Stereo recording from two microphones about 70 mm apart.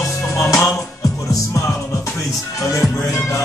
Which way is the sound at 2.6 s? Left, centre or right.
Left.